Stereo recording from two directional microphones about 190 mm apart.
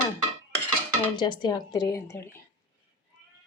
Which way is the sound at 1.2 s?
20° left (ahead or behind).